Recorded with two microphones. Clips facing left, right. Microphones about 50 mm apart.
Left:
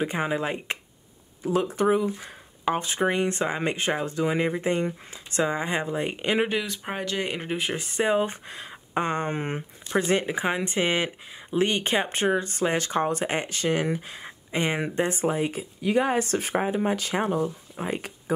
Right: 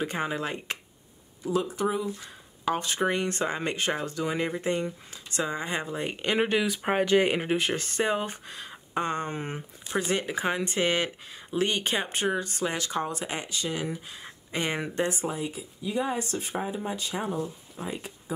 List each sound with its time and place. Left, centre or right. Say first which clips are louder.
0.0 s speech: left 3 dB; centre
1.4 s speech: left 4 dB; left
2.1 s speech: left 3 dB; left; by 6.8 s centre
6.8 s speech: right 7 dB; centre
7.4 s speech: right 2 dB; centre
8.3 s speech: left 2 dB; left
14.2 s speech: left 2 dB; centre
15.1 s speech: left 6 dB; left
16.5 s speech: left 7 dB; left
16.9 s speech: left 5 dB; left
17.7 s speech: left 3 dB; left